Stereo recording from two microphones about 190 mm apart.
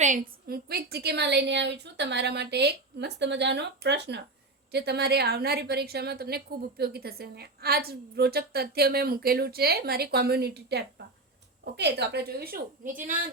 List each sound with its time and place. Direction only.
0.0 s a woman's voice: 45° right (ahead or behind)